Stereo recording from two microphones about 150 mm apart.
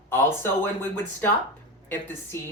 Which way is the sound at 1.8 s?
15° left (ahead or behind).